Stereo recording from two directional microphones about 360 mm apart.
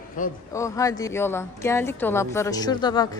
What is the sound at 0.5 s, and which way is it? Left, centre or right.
A woman's voice, centre.